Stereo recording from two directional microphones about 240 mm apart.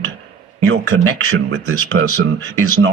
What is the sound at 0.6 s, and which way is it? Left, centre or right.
Speech, right.